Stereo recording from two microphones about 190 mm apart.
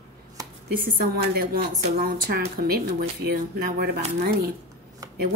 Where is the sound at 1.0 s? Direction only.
50° right (ahead or behind).